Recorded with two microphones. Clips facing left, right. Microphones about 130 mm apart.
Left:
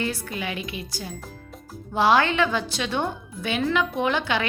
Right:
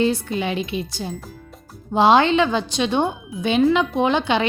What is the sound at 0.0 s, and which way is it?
Speech, 25° right (ahead or behind).